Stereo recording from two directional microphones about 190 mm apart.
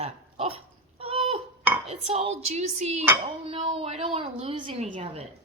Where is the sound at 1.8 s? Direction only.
30° right (ahead or behind).